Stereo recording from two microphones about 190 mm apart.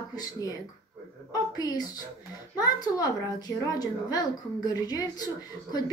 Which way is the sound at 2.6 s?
20° left (ahead or behind).